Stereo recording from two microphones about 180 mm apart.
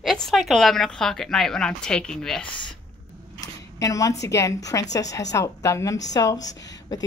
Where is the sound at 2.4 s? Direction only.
25° left (ahead or behind).